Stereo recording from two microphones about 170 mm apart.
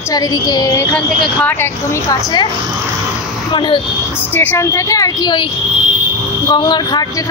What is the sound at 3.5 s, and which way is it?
Speech, 30° left (ahead or behind).